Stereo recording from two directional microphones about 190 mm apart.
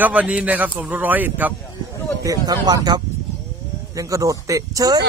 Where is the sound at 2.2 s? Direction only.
20° right (ahead or behind).